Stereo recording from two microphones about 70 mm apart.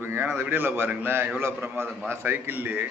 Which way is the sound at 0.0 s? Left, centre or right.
Right.